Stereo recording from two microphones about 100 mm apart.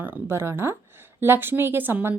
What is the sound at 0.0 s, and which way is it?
A woman's voice, 20° right (ahead or behind).